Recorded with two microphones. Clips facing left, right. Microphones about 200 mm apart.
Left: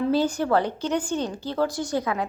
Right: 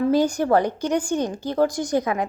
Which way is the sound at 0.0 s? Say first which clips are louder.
Right 3 dB; 15° right (ahead or behind).